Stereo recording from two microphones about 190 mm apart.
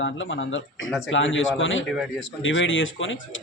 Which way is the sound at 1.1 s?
90° left.